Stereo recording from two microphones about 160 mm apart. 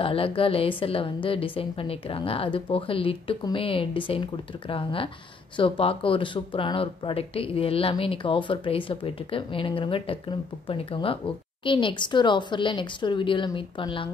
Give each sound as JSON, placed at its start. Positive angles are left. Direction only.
{"t": 0.0, "sound": "speech", "side_deg": 35}